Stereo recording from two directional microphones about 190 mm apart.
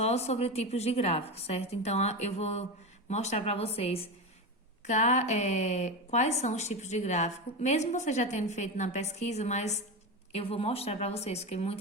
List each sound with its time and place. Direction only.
0.0 s a woman's voice: 35° left (ahead or behind)